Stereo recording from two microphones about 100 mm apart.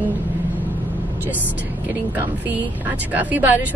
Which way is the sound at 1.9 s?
15° right (ahead or behind).